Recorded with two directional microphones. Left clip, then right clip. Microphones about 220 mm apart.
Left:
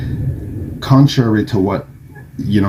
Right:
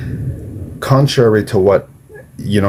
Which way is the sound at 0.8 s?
45° right (ahead or behind).